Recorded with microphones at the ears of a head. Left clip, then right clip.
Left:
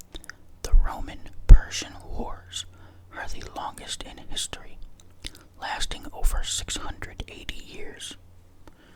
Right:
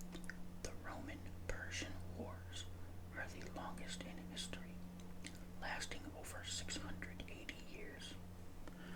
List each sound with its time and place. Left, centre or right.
0.1 s whispering: left
3.1 s speech: left